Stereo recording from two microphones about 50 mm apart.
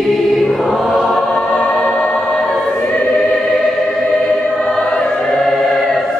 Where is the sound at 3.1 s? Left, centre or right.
Centre.